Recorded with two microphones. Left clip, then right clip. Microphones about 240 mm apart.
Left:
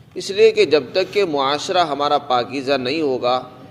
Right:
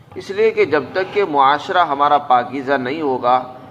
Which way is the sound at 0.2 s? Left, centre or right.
Left.